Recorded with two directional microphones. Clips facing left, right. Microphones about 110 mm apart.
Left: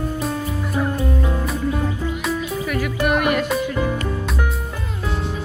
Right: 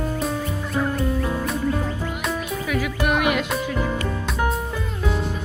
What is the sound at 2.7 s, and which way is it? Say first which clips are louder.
Speech: left 2 dB; centre (ahead or behind).